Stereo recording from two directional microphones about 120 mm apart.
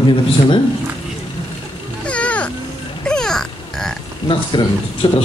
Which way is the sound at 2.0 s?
10° left (ahead or behind).